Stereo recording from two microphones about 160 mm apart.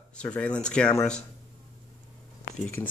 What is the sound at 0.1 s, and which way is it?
Speech, 5° left (ahead or behind).